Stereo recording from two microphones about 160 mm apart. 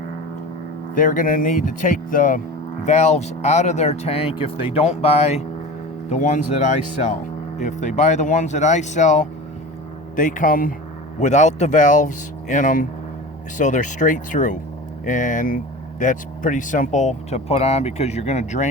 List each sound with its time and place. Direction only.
0.9 s speech: 55° left (ahead or behind)
2.8 s speech: 45° left (ahead or behind)
6.1 s speech: 50° left (ahead or behind)
11.2 s speech: 50° left (ahead or behind)